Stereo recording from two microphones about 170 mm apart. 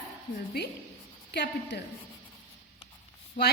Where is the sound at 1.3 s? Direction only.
80° left.